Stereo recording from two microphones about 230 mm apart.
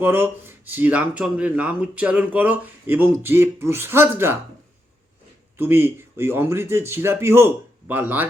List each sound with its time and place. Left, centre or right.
0.0 s speech: centre
5.5 s speech: centre